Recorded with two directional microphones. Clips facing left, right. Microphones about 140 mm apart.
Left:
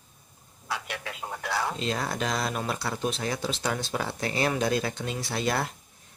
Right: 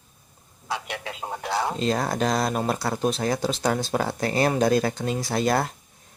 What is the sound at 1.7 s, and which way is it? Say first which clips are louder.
Speech: right 6 dB; 40° right (ahead or behind).